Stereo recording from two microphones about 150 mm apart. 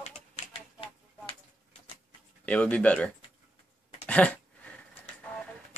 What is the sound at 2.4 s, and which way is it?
Speech, 10° left (ahead or behind).